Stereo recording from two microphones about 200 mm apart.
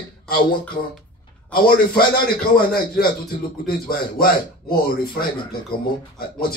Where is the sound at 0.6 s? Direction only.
5° left (ahead or behind).